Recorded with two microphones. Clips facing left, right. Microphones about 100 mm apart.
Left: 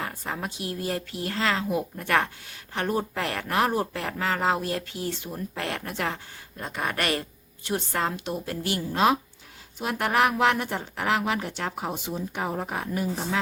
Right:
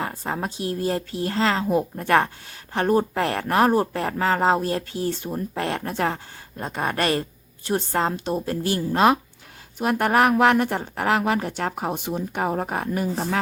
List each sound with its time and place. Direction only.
0.0 s speech: 35° right (ahead or behind)
9.7 s speech: 50° right (ahead or behind)